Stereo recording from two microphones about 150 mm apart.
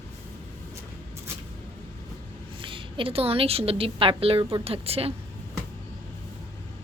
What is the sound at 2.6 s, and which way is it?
A woman's voice, 35° right (ahead or behind).